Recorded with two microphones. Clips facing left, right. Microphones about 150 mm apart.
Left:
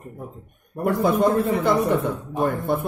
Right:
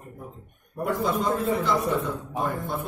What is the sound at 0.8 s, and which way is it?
A man's voice, 60° left (ahead or behind).